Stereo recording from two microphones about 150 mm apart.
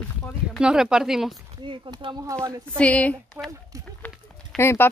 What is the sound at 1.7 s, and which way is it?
Speech, 35° right (ahead or behind).